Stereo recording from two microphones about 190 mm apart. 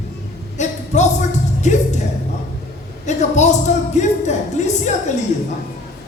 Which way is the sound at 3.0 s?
35° left (ahead or behind).